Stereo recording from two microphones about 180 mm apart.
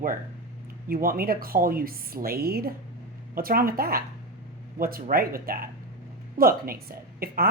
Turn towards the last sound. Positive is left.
turn(degrees=-55)  # may be behind; listen again after turning